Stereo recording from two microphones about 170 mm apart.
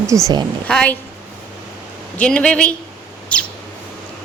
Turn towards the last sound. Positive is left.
turn(degrees=5)  # may be behind; listen again after turning